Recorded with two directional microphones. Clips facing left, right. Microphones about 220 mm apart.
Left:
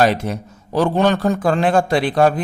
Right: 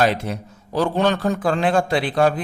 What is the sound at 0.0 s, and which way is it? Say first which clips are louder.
A man's voice: left 3 dB; 45° left (ahead or behind).